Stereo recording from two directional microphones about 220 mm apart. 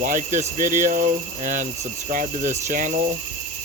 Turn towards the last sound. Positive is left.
turn(degrees=-35)  # may be behind; listen again after turning